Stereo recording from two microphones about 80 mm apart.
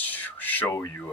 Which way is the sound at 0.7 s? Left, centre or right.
Left.